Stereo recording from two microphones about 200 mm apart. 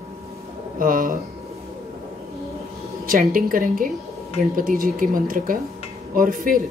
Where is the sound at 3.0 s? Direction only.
45° right (ahead or behind).